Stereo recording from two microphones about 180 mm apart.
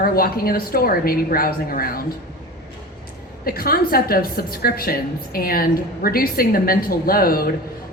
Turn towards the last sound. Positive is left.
turn(degrees=55)  # may be behind; listen again after turning